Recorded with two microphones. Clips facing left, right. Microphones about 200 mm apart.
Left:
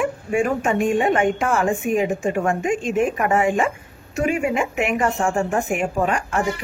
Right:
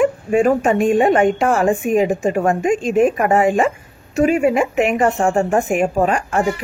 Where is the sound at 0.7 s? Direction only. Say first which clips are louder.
Right 5 dB; 35° right (ahead or behind).